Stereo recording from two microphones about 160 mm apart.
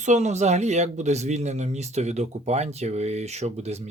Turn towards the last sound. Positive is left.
turn(degrees=-45)  # may be behind; listen again after turning